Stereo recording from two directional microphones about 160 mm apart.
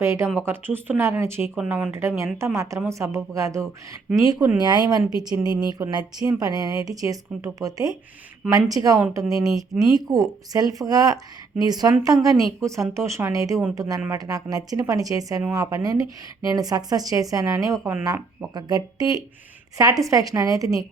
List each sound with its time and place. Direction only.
0.0 s speech: 15° right (ahead or behind)
1.9 s speech: 15° right (ahead or behind)